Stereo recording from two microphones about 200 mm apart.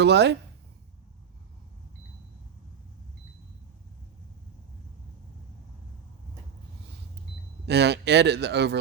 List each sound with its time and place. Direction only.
0.0 s speech: 60° right (ahead or behind)
7.7 s speech: 55° right (ahead or behind)